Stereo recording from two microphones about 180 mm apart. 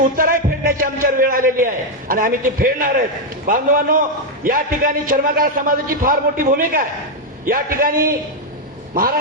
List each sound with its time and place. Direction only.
0.2 s a man's voice: 55° right (ahead or behind)